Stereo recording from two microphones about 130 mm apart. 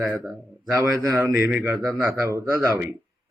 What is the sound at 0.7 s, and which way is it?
Speech, 25° right (ahead or behind).